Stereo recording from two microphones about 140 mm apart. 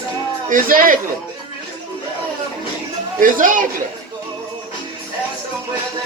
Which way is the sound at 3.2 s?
75° right (ahead or behind).